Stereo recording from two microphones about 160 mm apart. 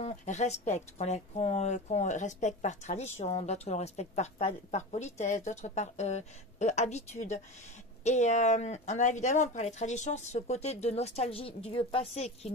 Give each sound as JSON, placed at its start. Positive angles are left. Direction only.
{"t": 0.0, "sound": "a woman's voice", "side_deg": 45}